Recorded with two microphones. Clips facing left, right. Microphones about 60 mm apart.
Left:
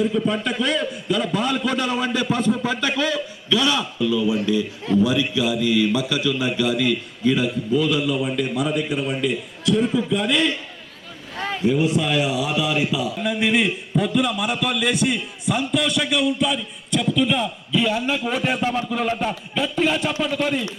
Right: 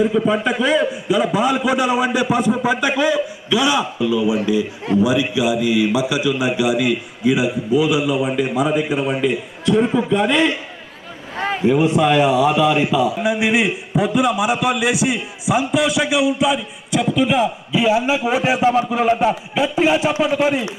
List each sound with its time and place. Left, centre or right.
0.4 s a man's voice: centre
9.8 s a man's voice: right
11.3 s a sound: right
11.6 s a man's voice: centre
12.9 s a man's voice: centre